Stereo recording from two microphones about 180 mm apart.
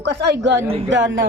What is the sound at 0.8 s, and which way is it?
Speech, 90° right.